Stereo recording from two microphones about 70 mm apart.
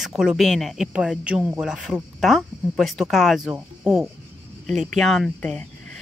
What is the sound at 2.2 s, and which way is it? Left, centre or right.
Speech, centre.